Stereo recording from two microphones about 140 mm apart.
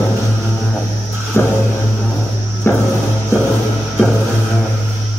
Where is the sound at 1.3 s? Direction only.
20° left (ahead or behind).